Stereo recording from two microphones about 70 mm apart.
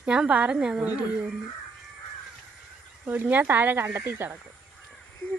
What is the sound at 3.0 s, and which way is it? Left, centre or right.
Speech, right.